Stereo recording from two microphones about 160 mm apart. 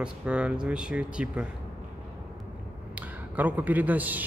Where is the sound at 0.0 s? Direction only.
5° right (ahead or behind).